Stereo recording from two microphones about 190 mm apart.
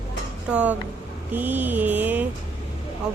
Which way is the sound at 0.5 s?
5° right (ahead or behind).